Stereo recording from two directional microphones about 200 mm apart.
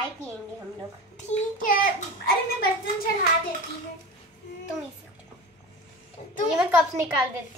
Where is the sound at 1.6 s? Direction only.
45° left (ahead or behind).